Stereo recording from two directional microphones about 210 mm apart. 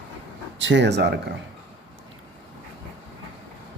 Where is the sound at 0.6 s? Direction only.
60° right (ahead or behind).